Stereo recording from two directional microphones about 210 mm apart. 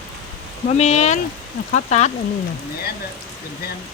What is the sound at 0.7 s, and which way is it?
Speech, 30° left (ahead or behind).